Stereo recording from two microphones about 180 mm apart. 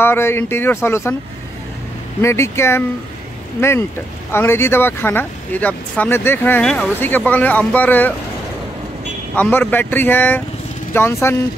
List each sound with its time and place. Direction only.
0.0 s speech: 15° left (ahead or behind)
2.2 s speech: 15° left (ahead or behind)
4.3 s speech: 15° left (ahead or behind)
9.3 s speech: 10° left (ahead or behind)